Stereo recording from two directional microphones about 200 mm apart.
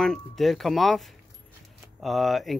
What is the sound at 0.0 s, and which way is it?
Speech, centre (ahead or behind).